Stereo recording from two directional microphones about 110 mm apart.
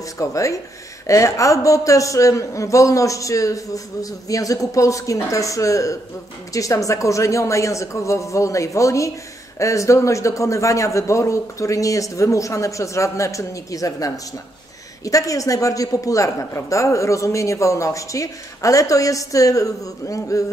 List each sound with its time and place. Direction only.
0.2 s a man's voice: 30° left (ahead or behind)